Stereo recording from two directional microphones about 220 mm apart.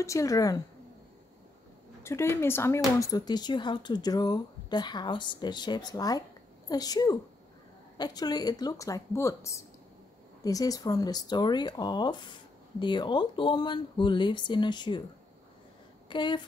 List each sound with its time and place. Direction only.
0.0 s speech: 15° left (ahead or behind)
2.0 s speech: 10° left (ahead or behind)
16.1 s speech: 20° left (ahead or behind)